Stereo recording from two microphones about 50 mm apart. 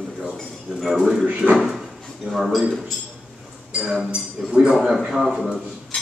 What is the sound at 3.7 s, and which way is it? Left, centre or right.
Speech, right.